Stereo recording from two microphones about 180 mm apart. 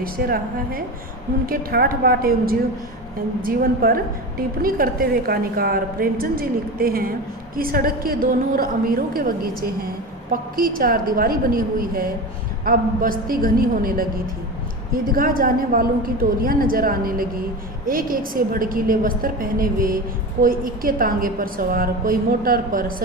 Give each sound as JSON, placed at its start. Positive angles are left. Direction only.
{"t": 0.0, "sound": "a woman's voice", "side_deg": -55}
{"t": 10.6, "sound": "a woman's voice", "side_deg": -50}